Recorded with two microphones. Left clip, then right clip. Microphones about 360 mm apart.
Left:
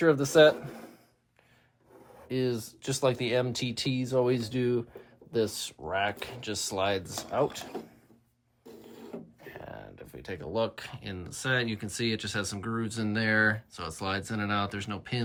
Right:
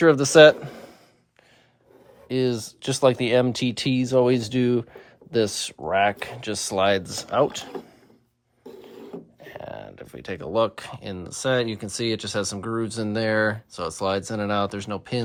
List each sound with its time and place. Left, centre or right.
0.0 s speech: right
2.3 s speech: right
9.4 s speech: right